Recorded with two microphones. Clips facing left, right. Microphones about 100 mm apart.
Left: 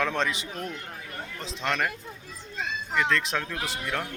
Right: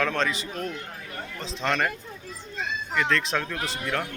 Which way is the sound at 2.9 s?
5° left (ahead or behind).